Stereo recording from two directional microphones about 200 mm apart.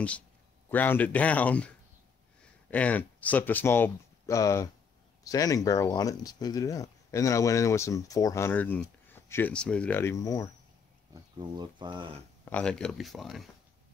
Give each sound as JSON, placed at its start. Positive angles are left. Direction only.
{"t": 0.7, "sound": "speech", "side_deg": 10}
{"t": 2.7, "sound": "speech", "side_deg": 10}
{"t": 11.3, "sound": "speech", "side_deg": -20}
{"t": 12.4, "sound": "speech", "side_deg": 5}